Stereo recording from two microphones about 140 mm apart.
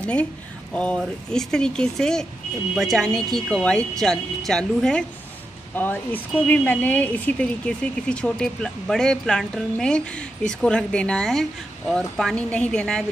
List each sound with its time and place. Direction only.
0.0 s speech: 10° left (ahead or behind)